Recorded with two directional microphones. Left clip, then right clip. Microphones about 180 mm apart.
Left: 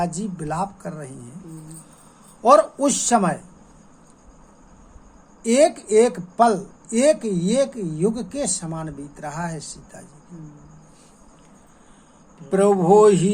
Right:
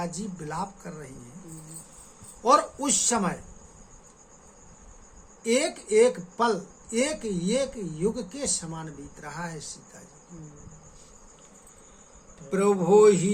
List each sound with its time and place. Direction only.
0.0 s speech: 35° left (ahead or behind)
2.4 s speech: 35° left (ahead or behind)
5.4 s speech: 35° left (ahead or behind)
12.5 s speech: 30° left (ahead or behind)